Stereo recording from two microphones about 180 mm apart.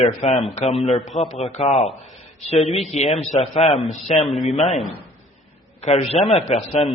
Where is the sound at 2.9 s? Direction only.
35° left (ahead or behind).